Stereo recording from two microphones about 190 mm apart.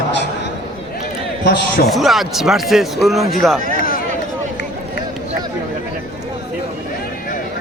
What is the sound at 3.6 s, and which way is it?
Run, 45° left (ahead or behind).